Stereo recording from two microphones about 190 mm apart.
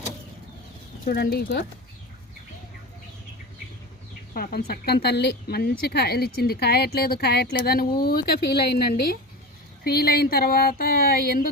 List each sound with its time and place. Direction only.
1.0 s speech: 55° left (ahead or behind)
4.7 s speech: 55° left (ahead or behind)